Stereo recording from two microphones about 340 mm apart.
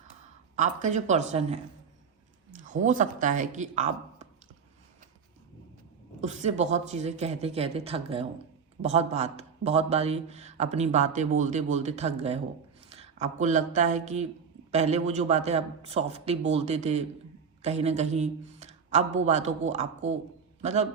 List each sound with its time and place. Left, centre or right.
0.5 s a man's voice: right
6.2 s a man's voice: centre